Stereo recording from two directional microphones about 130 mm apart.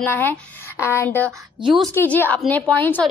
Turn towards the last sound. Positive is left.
turn(degrees=15)  # may be behind; listen again after turning